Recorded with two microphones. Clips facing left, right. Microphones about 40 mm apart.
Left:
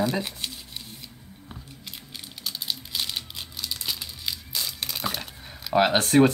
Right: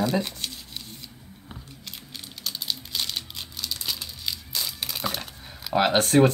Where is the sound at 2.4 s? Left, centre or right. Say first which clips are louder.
Even; centre.